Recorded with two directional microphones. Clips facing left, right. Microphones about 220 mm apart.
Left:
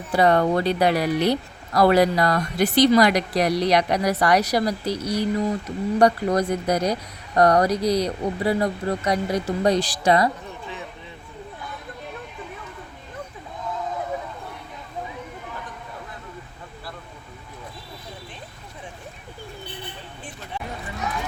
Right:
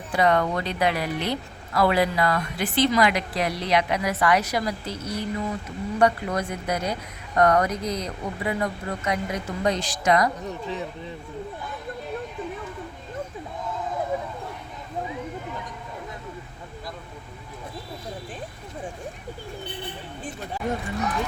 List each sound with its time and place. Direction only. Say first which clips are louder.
0.1 s speech: left 4 dB; 35° left (ahead or behind)